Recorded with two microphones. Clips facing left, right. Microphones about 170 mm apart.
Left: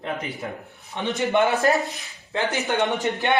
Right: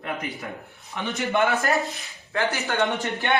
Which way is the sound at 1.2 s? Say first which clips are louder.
Left 3 dB; 20° left (ahead or behind).